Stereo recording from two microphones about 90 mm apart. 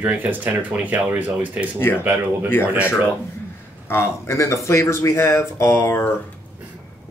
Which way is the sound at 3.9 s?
30° left (ahead or behind).